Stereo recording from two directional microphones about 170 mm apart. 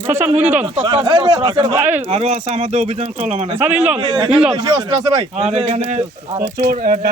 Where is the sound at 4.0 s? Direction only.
25° right (ahead or behind); by 6.0 s 40° right (ahead or behind).